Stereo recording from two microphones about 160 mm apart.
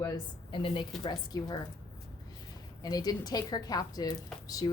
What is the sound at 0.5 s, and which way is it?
A woman's voice, 30° left (ahead or behind).